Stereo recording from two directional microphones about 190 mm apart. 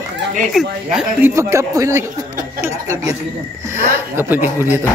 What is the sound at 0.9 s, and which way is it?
Speech, 15° right (ahead or behind).